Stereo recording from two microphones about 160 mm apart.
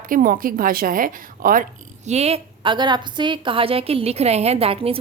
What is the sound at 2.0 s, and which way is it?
A woman's voice, 40° right (ahead or behind).